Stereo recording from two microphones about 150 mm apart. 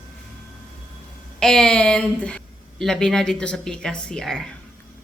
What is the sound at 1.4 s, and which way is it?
A woman's voice, 5° left (ahead or behind).